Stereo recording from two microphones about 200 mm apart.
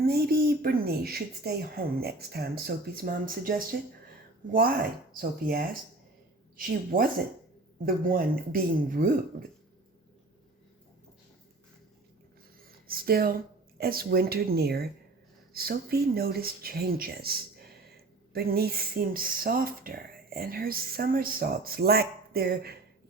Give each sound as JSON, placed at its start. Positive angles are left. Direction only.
{"t": 0.0, "sound": "speech", "side_deg": -50}
{"t": 12.6, "sound": "a sound", "side_deg": -50}
{"t": 13.7, "sound": "speech", "side_deg": -50}